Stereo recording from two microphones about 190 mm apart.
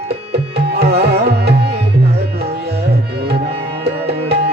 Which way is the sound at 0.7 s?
55° right (ahead or behind).